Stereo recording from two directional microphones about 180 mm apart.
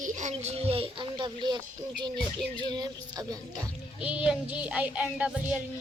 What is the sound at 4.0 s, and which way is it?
Music, 5° right (ahead or behind).